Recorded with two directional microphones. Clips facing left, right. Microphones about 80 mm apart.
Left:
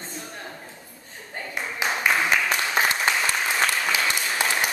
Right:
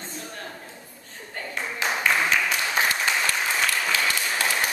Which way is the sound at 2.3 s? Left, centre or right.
Left.